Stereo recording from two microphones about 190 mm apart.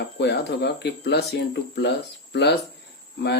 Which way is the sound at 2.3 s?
60° left (ahead or behind).